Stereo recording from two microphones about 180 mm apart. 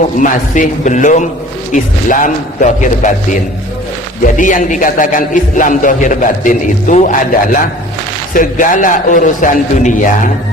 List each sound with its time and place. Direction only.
0.2 s a man's voice: 45° left (ahead or behind)